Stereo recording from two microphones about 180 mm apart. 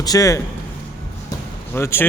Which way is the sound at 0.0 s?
20° left (ahead or behind).